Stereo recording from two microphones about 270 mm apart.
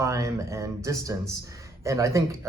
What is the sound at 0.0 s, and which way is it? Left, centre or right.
Speech, centre.